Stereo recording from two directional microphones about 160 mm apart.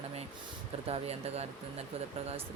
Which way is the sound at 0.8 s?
40° right (ahead or behind).